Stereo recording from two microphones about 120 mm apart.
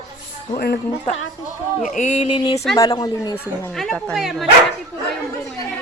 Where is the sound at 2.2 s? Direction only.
45° left (ahead or behind).